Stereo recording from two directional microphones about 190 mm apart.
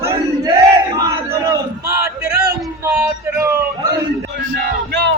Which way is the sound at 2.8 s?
15° right (ahead or behind).